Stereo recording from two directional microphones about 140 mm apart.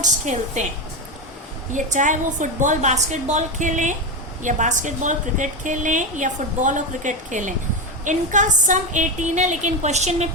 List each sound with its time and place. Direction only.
0.0 s speech: 55° right (ahead or behind)
1.7 s speech: 65° right (ahead or behind)